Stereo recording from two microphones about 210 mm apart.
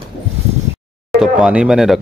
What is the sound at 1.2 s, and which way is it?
Speech, 5° right (ahead or behind).